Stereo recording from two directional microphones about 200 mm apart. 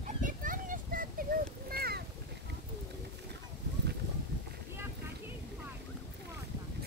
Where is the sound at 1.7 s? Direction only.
50° right (ahead or behind).